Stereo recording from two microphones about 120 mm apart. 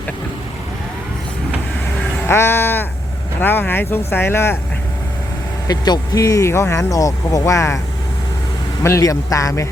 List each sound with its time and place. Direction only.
2.2 s speech: 20° left (ahead or behind)
5.6 s speech: 35° left (ahead or behind)
8.8 s speech: 25° left (ahead or behind)